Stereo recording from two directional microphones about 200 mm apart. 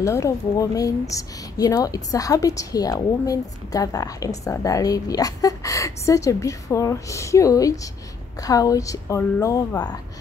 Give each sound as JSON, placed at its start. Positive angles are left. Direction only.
{"t": 0.0, "sound": "speech", "side_deg": 15}